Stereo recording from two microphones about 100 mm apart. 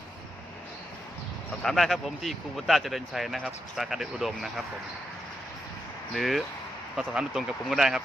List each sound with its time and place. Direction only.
1.6 s speech: centre (ahead or behind)
6.1 s speech: centre (ahead or behind)